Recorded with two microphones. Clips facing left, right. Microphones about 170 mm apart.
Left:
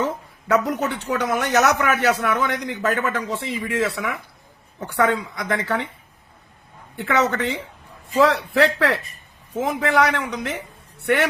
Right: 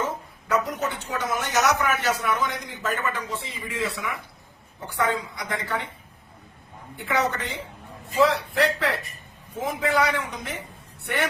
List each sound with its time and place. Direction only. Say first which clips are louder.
0.4 s a man's voice: left 5 dB; 70° left (ahead or behind)
7.0 s a man's voice: left 5 dB; 70° left (ahead or behind)